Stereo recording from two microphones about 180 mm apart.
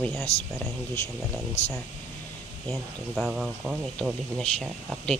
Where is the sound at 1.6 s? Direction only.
35° left (ahead or behind).